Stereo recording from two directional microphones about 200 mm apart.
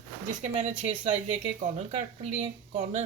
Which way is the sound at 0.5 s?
30° right (ahead or behind).